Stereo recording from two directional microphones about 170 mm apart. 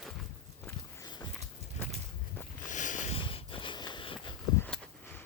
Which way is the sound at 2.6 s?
50° left (ahead or behind).